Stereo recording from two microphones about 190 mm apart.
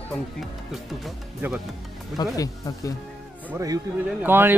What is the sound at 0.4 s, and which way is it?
Speech, centre (ahead or behind).